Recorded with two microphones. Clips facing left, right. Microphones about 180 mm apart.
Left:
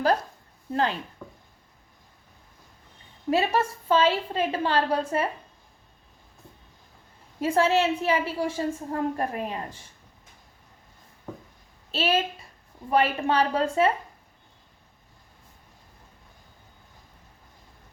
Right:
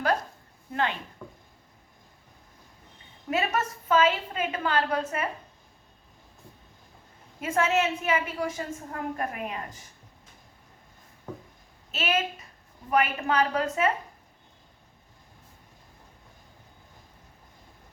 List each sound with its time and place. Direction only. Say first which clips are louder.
0.7 s a woman's voice: left 3 dB; 35° left (ahead or behind)
1.2 s a sound: even; centre (ahead or behind)
3.2 s a woman's voice: left 4 dB; 30° left (ahead or behind)
7.4 s a woman's voice: left 3 dB; 30° left (ahead or behind)
11.9 s a woman's voice: left 3 dB; 30° left (ahead or behind)